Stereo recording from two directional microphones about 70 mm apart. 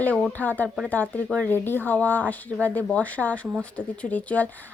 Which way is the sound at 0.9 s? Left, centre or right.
Left.